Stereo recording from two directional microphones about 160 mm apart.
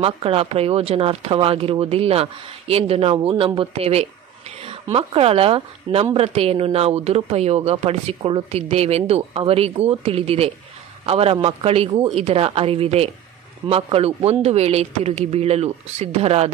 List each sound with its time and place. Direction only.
0.0 s speech: 35° right (ahead or behind)